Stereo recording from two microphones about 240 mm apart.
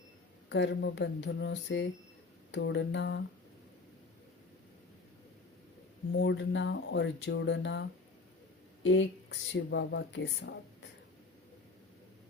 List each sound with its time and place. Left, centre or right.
0.5 s speech: left
6.1 s speech: left